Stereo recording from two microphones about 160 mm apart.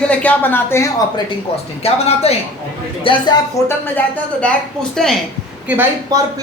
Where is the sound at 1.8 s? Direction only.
40° left (ahead or behind).